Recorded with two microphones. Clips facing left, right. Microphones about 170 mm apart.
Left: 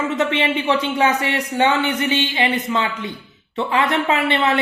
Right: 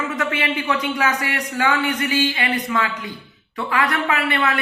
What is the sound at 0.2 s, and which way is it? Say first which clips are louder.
A man's voice: left 4 dB; 25° left (ahead or behind).